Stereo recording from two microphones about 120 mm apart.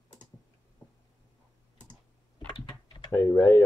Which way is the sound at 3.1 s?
20° left (ahead or behind).